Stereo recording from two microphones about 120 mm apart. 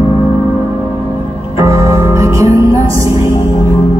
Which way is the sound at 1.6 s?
25° right (ahead or behind).